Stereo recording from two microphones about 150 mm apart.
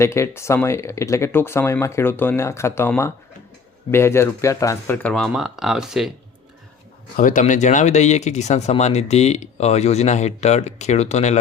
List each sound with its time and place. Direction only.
0.0 s speech: 20° left (ahead or behind)
5.0 s speech: centre (ahead or behind)
7.2 s speech: 60° left (ahead or behind)